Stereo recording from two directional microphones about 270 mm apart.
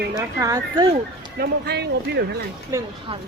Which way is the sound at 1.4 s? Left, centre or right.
Right.